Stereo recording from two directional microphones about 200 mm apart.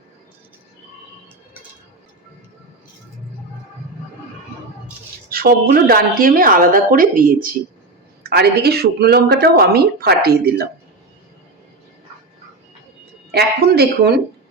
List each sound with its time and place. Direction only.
5.3 s speech: 50° right (ahead or behind)
13.3 s speech: 50° right (ahead or behind)